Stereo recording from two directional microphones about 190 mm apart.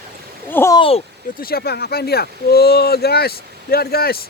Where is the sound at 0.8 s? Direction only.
30° left (ahead or behind).